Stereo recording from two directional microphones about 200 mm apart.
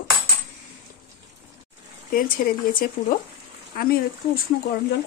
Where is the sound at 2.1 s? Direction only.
45° left (ahead or behind).